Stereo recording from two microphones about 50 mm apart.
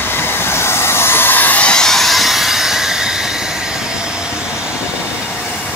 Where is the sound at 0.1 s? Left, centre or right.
Left.